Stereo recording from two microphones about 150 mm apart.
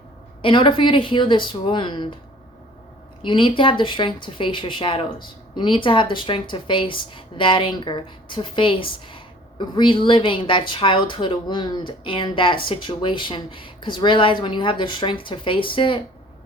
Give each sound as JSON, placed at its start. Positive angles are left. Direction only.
{"t": 0.4, "sound": "a woman's voice", "side_deg": 35}
{"t": 3.2, "sound": "a woman's voice", "side_deg": 35}